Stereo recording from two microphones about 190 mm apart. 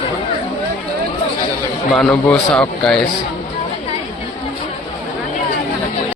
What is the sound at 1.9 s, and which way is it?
A man's voice, 5° left (ahead or behind).